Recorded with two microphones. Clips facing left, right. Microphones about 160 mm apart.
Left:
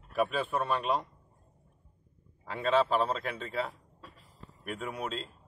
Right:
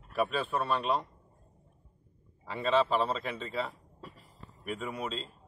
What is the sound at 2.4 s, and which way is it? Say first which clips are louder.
A man's voice: even; 5° left (ahead or behind).